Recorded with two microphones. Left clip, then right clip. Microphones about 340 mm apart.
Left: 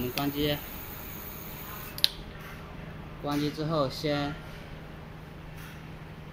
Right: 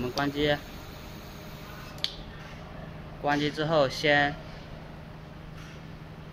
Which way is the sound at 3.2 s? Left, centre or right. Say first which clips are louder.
Right 4 dB; right.